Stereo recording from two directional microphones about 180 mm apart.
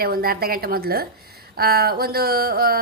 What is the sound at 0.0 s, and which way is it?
Mantra, 55° right (ahead or behind).